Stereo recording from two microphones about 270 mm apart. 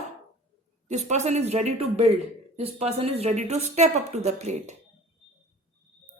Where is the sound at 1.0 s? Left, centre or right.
Right.